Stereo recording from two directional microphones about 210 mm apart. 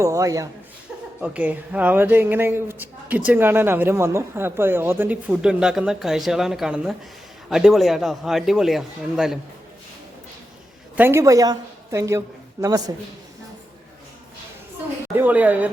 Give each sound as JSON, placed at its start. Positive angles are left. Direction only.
{"t": 0.0, "sound": "a man's voice", "side_deg": -15}
{"t": 10.9, "sound": "speech", "side_deg": -10}
{"t": 15.1, "sound": "speech", "side_deg": -10}